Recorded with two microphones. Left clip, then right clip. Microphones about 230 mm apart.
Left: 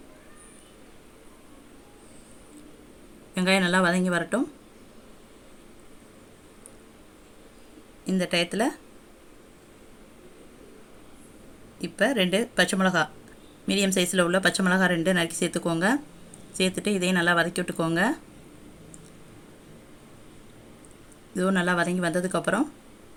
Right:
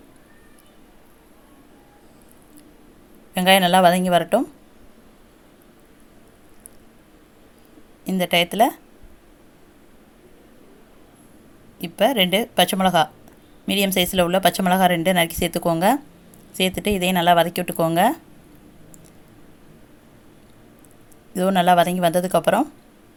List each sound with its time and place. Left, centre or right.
3.3 s speech: right
8.0 s speech: right
11.8 s speech: right
21.3 s speech: right